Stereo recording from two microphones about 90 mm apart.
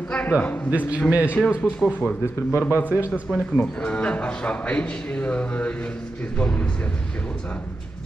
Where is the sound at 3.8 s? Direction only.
15° left (ahead or behind).